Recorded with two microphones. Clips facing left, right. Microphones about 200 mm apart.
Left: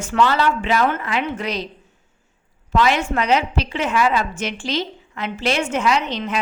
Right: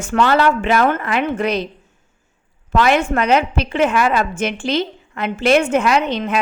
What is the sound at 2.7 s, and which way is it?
A woman's voice, 55° right (ahead or behind).